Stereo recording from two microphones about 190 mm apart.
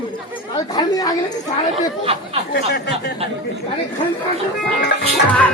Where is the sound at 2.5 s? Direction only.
60° left (ahead or behind).